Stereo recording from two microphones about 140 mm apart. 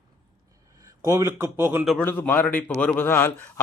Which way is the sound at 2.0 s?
15° left (ahead or behind).